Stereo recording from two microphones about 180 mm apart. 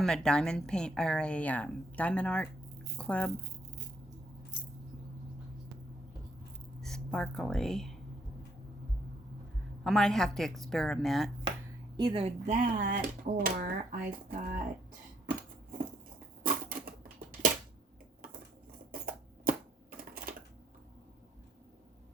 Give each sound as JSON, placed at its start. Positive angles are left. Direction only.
{"t": 0.0, "sound": "a woman's voice", "side_deg": 5}
{"t": 6.8, "sound": "speech", "side_deg": 5}
{"t": 9.8, "sound": "a woman's voice", "side_deg": 0}
{"t": 11.9, "sound": "speech", "side_deg": -30}
{"t": 16.4, "sound": "typewriter", "side_deg": -50}
{"t": 18.9, "sound": "a sound", "side_deg": -50}